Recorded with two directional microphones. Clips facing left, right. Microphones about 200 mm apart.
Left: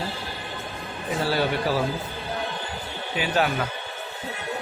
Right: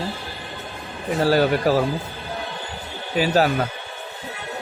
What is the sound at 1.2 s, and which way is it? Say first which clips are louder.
Speech: right 7 dB; 40° right (ahead or behind).